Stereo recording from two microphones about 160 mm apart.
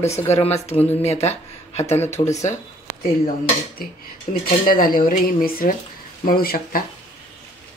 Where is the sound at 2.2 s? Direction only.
45° left (ahead or behind).